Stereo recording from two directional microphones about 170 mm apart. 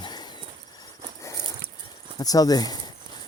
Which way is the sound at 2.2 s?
20° left (ahead or behind).